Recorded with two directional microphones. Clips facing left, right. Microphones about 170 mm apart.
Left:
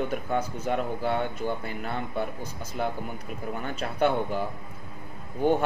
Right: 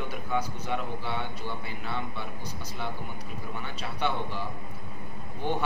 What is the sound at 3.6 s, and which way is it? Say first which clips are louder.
Speech: left 6 dB; 50° left (ahead or behind).